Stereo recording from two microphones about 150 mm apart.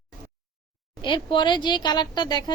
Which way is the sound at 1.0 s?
30° left (ahead or behind).